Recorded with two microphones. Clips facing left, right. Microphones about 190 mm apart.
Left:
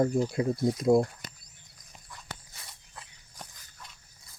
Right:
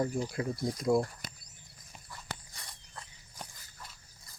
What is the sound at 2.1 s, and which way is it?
Walk, 5° left (ahead or behind).